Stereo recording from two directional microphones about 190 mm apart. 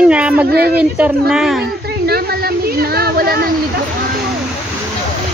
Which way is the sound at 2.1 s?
55° right (ahead or behind).